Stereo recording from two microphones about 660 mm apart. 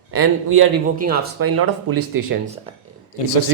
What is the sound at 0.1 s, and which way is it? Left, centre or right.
Speech, centre.